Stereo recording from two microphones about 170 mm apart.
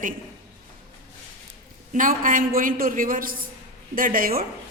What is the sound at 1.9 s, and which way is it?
A woman's voice, 50° right (ahead or behind).